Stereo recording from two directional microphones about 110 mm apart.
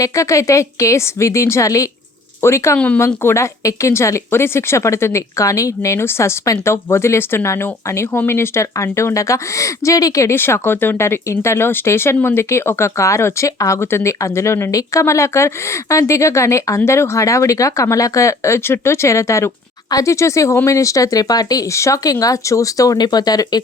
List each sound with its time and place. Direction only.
0.0 s speech: 30° left (ahead or behind)
2.7 s speech: 10° left (ahead or behind)
3.2 s speech: 25° left (ahead or behind)